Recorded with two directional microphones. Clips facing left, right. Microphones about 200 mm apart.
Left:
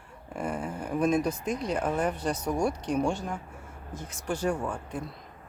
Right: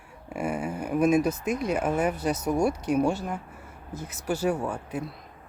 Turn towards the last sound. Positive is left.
turn(degrees=-5)  # may be behind; listen again after turning